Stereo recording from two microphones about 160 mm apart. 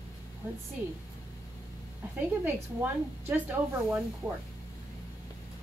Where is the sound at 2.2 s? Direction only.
15° right (ahead or behind).